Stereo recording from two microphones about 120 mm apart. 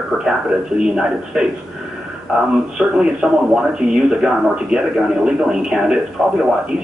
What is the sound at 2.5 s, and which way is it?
A man's voice, 5° right (ahead or behind).